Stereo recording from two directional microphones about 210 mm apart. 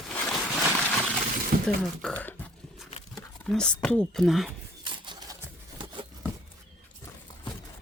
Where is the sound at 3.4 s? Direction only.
5° left (ahead or behind).